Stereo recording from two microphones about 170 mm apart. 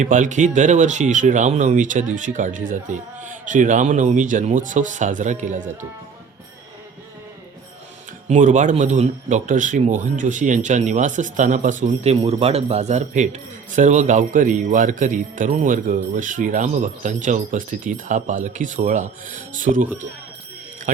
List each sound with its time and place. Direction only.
0.0 s speech: 45° right (ahead or behind)
8.3 s speech: 45° right (ahead or behind)